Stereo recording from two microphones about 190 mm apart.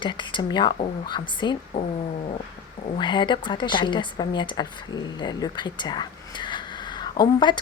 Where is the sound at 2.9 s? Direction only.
25° left (ahead or behind).